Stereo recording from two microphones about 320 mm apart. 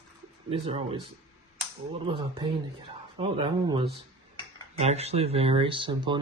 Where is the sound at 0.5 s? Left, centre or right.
Centre.